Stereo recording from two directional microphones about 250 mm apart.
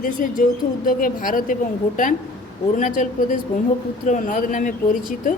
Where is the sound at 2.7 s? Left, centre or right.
Left.